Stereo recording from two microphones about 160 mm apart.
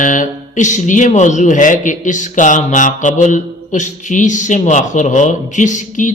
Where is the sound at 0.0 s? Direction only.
55° left (ahead or behind).